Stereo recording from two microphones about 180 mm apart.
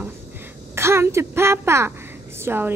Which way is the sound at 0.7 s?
15° right (ahead or behind).